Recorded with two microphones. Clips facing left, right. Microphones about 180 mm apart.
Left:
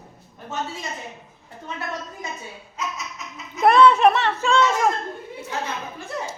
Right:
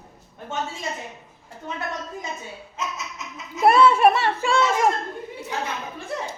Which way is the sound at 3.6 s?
5° right (ahead or behind).